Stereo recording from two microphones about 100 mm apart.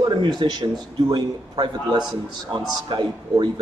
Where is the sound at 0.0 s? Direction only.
45° right (ahead or behind).